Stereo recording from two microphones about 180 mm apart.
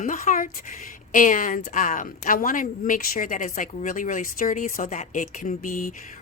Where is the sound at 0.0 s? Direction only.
45° left (ahead or behind).